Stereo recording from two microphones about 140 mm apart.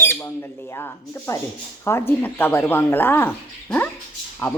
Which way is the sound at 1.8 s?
15° left (ahead or behind).